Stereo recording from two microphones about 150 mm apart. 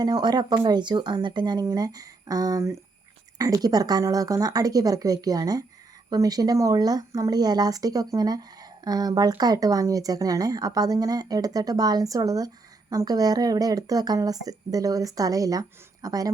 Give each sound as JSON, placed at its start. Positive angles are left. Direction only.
{"t": 0.0, "sound": "speech", "side_deg": -30}